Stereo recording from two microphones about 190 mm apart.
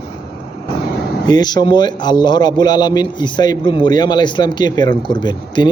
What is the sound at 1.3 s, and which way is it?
A man's voice, 20° left (ahead or behind).